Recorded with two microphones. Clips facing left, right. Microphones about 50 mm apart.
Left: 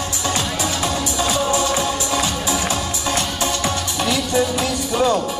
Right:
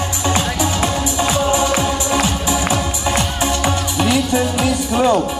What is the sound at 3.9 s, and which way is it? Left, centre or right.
Music, centre.